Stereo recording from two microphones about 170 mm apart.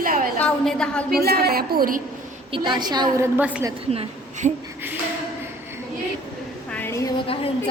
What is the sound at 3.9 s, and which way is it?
Speech, 35° right (ahead or behind).